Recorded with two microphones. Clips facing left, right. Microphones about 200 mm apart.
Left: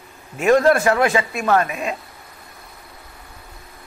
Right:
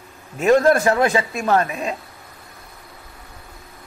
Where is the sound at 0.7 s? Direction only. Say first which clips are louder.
Even; 30° right (ahead or behind).